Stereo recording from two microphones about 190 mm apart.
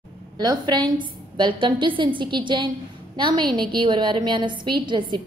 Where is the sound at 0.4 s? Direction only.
20° right (ahead or behind).